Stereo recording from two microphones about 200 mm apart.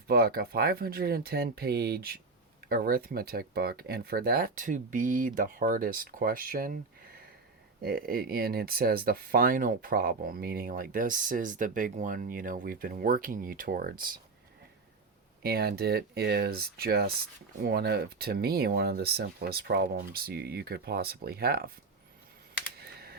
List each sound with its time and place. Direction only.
0.1 s speech: 50° right (ahead or behind)
7.8 s speech: 50° right (ahead or behind)
15.4 s speech: 50° right (ahead or behind)
22.8 s computer keyboard: 50° right (ahead or behind)